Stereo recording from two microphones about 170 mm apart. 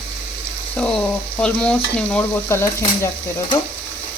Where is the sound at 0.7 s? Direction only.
5° left (ahead or behind).